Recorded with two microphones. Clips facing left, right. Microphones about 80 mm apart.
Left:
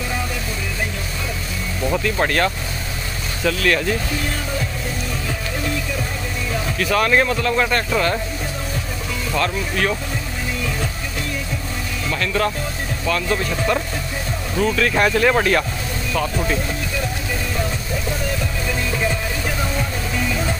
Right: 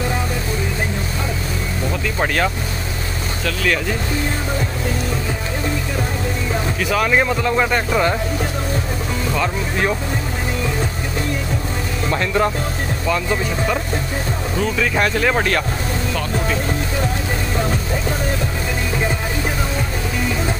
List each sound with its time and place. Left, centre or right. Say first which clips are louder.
2.0 s speech: right 1 dB; centre
6.8 s speech: left 1 dB; centre
12.1 s speech: right 2 dB; right; by 15.6 s centre